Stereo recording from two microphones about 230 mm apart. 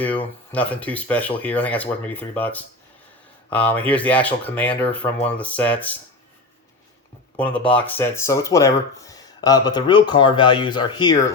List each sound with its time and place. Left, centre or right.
0.5 s speech: centre
7.3 s speech: centre